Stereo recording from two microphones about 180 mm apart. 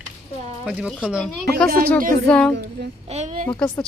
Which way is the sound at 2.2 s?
5° left (ahead or behind).